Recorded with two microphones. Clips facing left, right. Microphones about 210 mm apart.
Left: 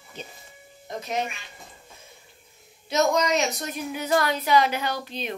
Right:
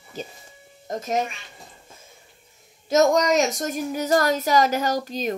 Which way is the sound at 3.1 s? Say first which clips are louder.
Right 4 dB; 45° right (ahead or behind).